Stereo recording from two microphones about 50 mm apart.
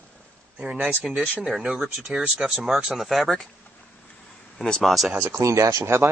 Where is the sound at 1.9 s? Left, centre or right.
Centre.